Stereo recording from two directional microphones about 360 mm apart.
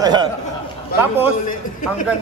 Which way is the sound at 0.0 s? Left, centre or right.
Centre.